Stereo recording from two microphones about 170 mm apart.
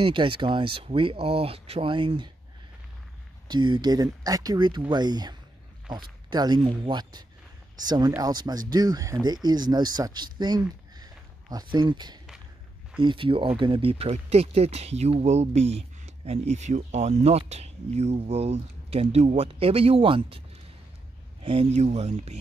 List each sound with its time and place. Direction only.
0.0 s speech: 30° right (ahead or behind)
3.4 s speech: 25° right (ahead or behind)
11.0 s a sound: 20° right (ahead or behind)
11.7 s speech: 25° right (ahead or behind)